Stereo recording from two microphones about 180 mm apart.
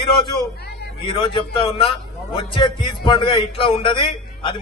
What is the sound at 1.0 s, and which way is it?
A man's voice, 30° left (ahead or behind).